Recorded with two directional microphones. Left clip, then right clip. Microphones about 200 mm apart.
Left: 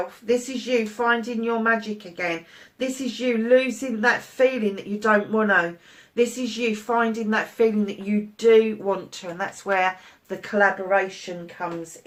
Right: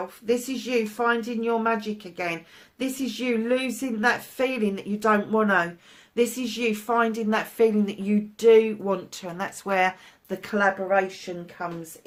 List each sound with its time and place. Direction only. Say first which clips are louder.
0.3 s a woman's voice: left 3 dB; 50° right (ahead or behind)